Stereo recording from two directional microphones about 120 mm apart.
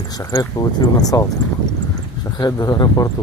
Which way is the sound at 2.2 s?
35° left (ahead or behind).